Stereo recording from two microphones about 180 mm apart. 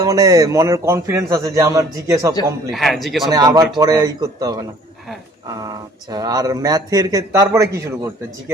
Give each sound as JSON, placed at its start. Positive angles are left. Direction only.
{"t": 0.0, "sound": "a man's voice", "side_deg": -20}
{"t": 2.7, "sound": "a man's voice", "side_deg": 0}
{"t": 3.3, "sound": "a man's voice", "side_deg": -20}